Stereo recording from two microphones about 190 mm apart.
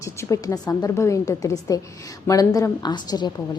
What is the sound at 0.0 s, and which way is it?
A woman's voice, 15° left (ahead or behind).